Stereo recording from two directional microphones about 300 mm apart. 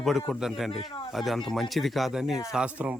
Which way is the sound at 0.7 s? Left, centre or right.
Centre.